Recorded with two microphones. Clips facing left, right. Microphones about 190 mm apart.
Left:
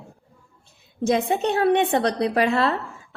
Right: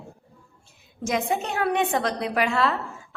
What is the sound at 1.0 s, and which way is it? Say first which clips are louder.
A woman's voice: left 5 dB; 35° left (ahead or behind).